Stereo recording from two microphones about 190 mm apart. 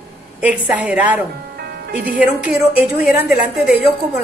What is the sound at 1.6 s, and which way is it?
Music, 60° right (ahead or behind).